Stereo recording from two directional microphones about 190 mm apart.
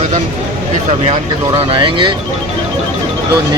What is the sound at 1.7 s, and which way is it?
Speech, 25° right (ahead or behind).